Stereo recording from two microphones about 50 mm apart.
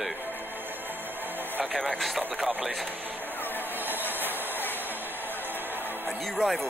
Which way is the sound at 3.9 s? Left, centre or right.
Right.